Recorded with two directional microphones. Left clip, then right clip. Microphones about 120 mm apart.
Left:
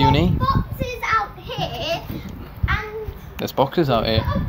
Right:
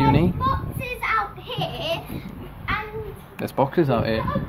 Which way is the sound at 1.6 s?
5° right (ahead or behind).